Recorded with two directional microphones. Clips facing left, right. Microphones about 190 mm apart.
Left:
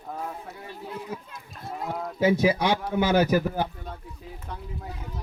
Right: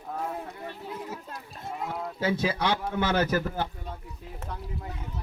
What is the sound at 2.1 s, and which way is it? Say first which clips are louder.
Speech: left 7 dB; 15° left (ahead or behind).